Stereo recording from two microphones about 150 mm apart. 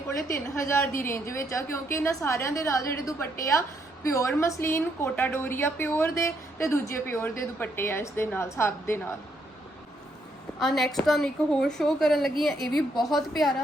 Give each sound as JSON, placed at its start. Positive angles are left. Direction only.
{"t": 0.5, "sound": "a woman's voice", "side_deg": 20}
{"t": 10.6, "sound": "a woman's voice", "side_deg": 0}